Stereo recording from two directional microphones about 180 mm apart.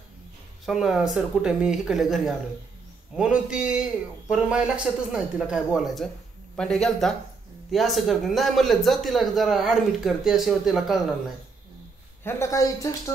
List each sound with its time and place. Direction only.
0.7 s a man's voice: centre (ahead or behind)
12.2 s speech: 15° left (ahead or behind)